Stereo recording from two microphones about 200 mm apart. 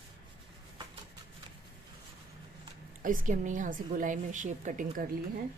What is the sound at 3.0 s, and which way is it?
A woman's voice, 40° right (ahead or behind).